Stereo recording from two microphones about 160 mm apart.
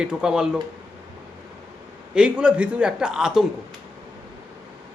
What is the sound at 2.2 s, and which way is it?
A man's voice, 5° right (ahead or behind).